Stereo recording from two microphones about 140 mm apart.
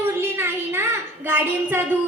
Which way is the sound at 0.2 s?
15° right (ahead or behind).